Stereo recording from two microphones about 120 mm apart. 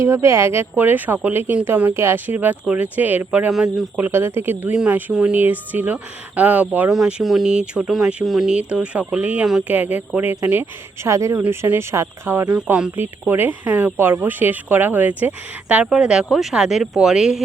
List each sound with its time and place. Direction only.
0.0 s speech: 20° right (ahead or behind)
3.5 s speech: centre (ahead or behind)
3.9 s speech: 20° right (ahead or behind)
12.5 s speech: 10° right (ahead or behind)